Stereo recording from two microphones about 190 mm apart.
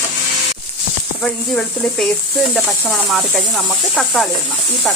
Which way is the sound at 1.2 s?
Centre (ahead or behind).